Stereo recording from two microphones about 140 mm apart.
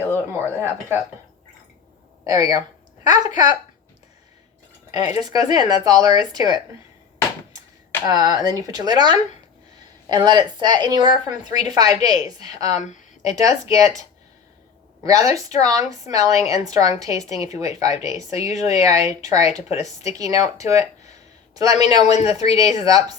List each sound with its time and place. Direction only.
0.3 s speech: 15° right (ahead or behind)
2.2 s a sound: 25° right (ahead or behind)
3.3 s speech: 30° right (ahead or behind)
4.9 s speech: 55° left (ahead or behind)
5.2 s speech: 30° right (ahead or behind)
8.0 s speech: 30° right (ahead or behind)
12.7 s speech: 60° left (ahead or behind)
13.2 s speech: 25° right (ahead or behind)
15.0 s speech: 25° right (ahead or behind)